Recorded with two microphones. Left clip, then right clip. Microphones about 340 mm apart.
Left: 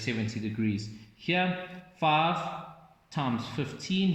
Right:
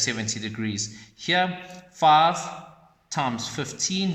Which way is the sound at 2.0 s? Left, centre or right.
Right.